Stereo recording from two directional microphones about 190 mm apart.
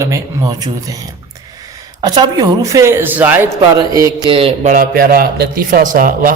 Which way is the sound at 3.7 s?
20° right (ahead or behind).